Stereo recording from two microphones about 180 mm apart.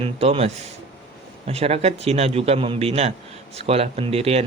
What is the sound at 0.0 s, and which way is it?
A man's voice, 35° right (ahead or behind).